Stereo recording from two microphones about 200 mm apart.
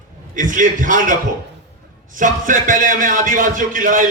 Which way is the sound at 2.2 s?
40° right (ahead or behind).